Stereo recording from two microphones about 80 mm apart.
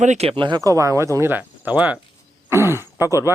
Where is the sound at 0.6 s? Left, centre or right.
Right.